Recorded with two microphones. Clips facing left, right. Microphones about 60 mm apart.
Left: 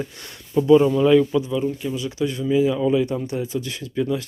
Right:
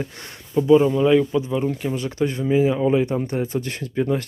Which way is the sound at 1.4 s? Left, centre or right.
Right.